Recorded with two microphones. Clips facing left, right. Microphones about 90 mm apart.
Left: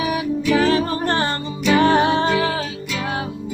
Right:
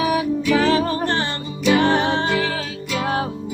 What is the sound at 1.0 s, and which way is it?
Music, 40° left (ahead or behind).